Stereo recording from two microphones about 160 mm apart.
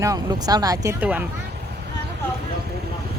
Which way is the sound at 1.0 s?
10° right (ahead or behind).